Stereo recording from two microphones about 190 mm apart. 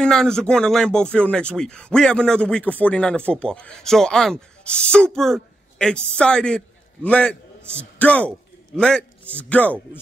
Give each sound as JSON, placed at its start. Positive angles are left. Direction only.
{"t": 0.0, "sound": "speech", "side_deg": 5}